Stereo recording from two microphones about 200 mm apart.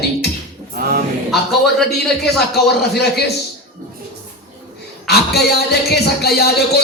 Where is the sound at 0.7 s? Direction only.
50° right (ahead or behind).